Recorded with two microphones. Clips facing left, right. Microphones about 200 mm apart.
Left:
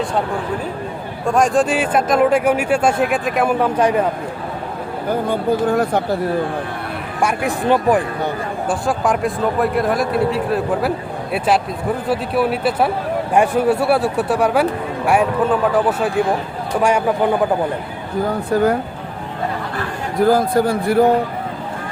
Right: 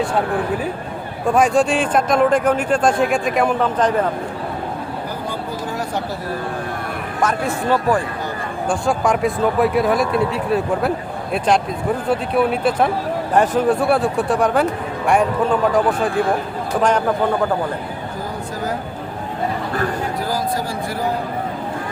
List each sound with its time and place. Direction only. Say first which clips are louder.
1.3 s speech: even; centre (ahead or behind)
5.3 s a man's voice: left 9 dB; 55° left (ahead or behind)
7.2 s speech: left 1 dB; 10° left (ahead or behind)
8.7 s speech: right 1 dB; centre (ahead or behind)
18.5 s a man's voice: left 13 dB; 65° left (ahead or behind)
20.2 s a man's voice: left 13 dB; 55° left (ahead or behind)